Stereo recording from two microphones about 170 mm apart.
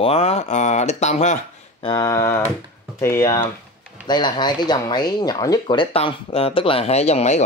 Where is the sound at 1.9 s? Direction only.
20° left (ahead or behind).